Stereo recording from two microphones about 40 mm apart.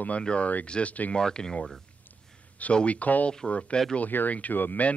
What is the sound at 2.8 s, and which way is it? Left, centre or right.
Speech, left.